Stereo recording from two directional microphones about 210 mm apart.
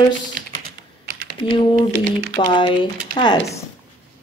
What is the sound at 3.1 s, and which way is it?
Speech, 20° left (ahead or behind).